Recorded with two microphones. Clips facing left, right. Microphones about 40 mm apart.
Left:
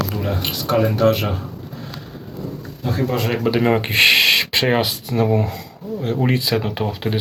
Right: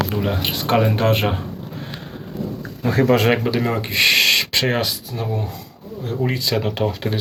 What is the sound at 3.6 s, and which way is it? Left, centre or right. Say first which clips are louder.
Speech: left 4 dB; left.